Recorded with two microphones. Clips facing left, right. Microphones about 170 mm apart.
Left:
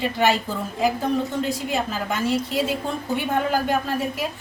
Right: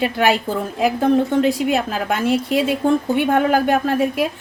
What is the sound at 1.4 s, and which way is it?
A woman's voice, 65° right (ahead or behind).